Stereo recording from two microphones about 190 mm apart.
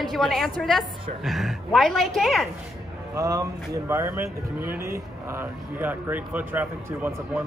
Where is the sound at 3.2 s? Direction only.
15° right (ahead or behind).